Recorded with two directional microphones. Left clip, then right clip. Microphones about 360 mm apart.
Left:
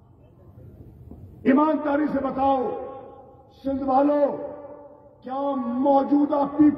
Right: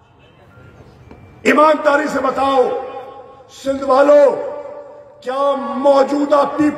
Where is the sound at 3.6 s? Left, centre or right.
Right.